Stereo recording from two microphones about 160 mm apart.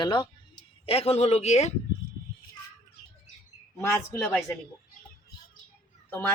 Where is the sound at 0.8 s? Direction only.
40° left (ahead or behind).